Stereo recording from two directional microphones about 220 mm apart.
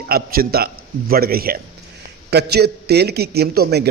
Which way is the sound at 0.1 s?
45° right (ahead or behind).